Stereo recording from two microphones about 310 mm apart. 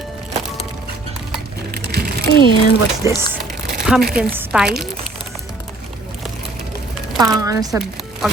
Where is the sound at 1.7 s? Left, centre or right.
Right.